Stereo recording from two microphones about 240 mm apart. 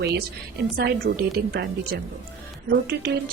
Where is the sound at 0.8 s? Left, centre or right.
Right.